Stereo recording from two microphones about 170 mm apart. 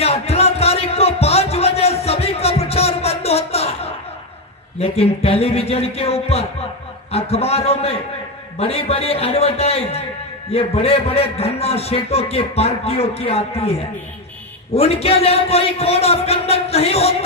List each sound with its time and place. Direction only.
0.0 s music: 35° left (ahead or behind)
4.7 s a man's voice: 35° left (ahead or behind)